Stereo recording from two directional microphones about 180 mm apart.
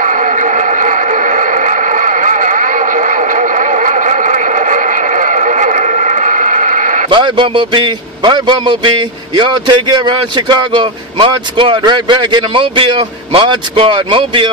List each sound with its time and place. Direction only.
0.0 s radio: 45° right (ahead or behind)
7.1 s a man's voice: 25° right (ahead or behind)